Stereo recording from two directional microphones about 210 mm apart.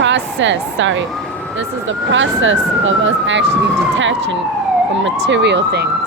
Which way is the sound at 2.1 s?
65° right (ahead or behind).